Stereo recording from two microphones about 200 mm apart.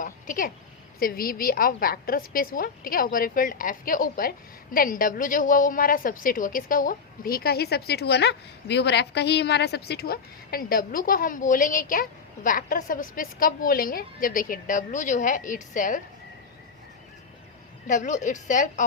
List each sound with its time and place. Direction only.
0.0 s a sound: 40° left (ahead or behind)
0.9 s a woman's voice: 45° left (ahead or behind)
17.8 s a woman's voice: 40° left (ahead or behind)